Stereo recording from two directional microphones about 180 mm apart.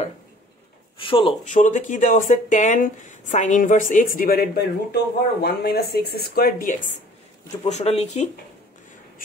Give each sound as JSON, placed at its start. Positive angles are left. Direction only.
{"t": 0.9, "sound": "speech", "side_deg": 30}
{"t": 1.4, "sound": "speech", "side_deg": 45}
{"t": 7.6, "sound": "speech", "side_deg": 35}